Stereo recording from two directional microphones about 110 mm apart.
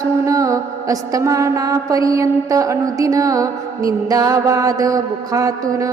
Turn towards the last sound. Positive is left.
turn(degrees=-30)  # may be behind; listen again after turning